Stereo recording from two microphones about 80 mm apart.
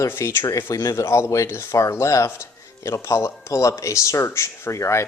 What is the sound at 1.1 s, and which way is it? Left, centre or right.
Speech, left.